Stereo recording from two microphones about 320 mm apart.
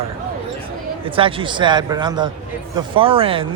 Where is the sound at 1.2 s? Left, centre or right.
Centre.